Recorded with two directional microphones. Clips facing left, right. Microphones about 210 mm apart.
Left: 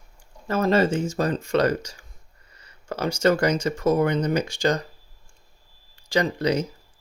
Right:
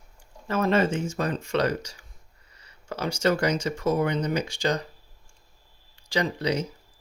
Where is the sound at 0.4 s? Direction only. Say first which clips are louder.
Left 2 dB; 40° left (ahead or behind).